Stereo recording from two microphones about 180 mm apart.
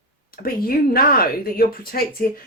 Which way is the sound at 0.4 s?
55° left (ahead or behind).